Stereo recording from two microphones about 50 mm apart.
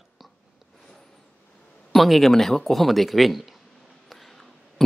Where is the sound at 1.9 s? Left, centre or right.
Centre.